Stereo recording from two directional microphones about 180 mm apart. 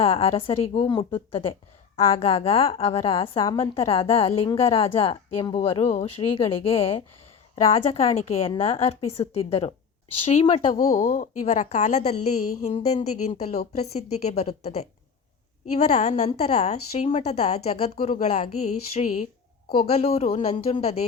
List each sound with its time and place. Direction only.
0.0 s a woman's voice: 30° left (ahead or behind)
10.8 s a woman's voice: 50° left (ahead or behind)
19.8 s a woman's voice: 35° left (ahead or behind)